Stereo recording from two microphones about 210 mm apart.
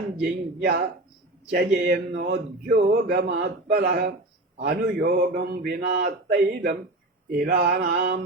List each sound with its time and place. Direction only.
0.2 s speech: 50° right (ahead or behind)